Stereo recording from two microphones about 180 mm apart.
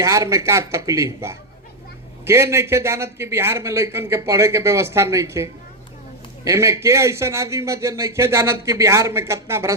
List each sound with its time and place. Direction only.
0.0 s a man's voice: 20° right (ahead or behind)